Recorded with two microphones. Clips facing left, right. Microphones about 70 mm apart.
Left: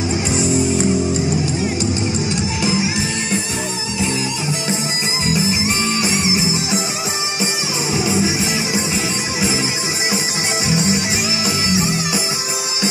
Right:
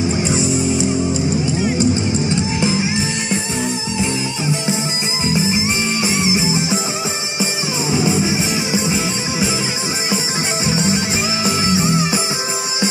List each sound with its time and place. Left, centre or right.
1.8 s music: right
5.2 s music: right
7.9 s music: right
10.6 s music: right